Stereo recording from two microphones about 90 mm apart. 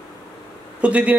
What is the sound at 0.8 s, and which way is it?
Speech, 15° right (ahead or behind).